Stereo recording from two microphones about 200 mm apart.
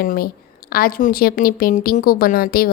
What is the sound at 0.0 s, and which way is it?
A woman's voice, 45° left (ahead or behind).